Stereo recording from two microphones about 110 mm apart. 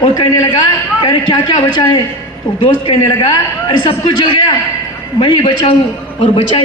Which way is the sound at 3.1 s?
40° left (ahead or behind).